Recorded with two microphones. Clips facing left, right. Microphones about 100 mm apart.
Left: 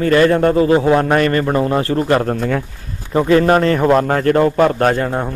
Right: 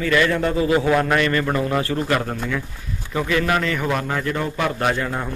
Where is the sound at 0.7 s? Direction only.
35° left (ahead or behind).